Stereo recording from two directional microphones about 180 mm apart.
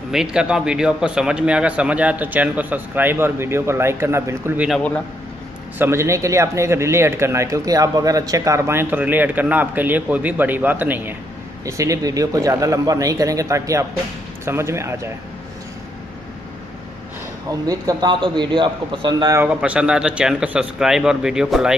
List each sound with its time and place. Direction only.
0.1 s speech: 5° right (ahead or behind)
4.6 s speech: 5° left (ahead or behind)
5.8 s speech: 15° right (ahead or behind)
17.5 s a man's voice: 20° right (ahead or behind)
19.5 s speech: 5° right (ahead or behind)